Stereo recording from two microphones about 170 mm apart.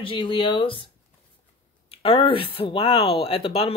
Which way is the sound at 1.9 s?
35° left (ahead or behind).